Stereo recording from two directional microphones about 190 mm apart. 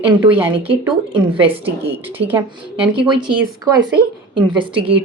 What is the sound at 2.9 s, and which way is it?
Speech, 25° right (ahead or behind).